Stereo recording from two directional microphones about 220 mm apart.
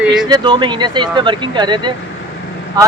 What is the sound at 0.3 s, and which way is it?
Speech, 20° right (ahead or behind).